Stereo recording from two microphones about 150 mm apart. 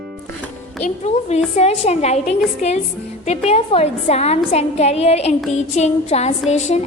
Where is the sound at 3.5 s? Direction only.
45° left (ahead or behind).